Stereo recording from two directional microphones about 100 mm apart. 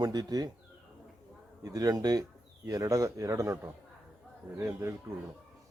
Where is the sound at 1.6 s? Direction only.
35° right (ahead or behind).